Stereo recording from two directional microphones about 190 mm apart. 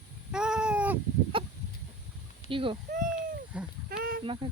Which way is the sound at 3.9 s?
50° right (ahead or behind).